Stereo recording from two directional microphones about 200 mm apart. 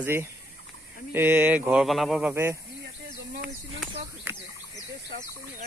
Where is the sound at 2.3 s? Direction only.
10° right (ahead or behind).